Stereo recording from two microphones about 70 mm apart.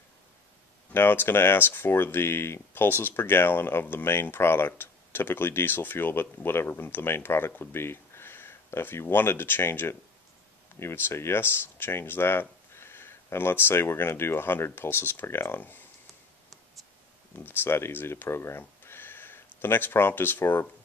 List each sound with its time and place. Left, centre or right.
0.9 s speech: left
17.4 s speech: left